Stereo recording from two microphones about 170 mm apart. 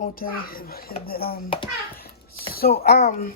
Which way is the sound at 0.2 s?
60° left (ahead or behind).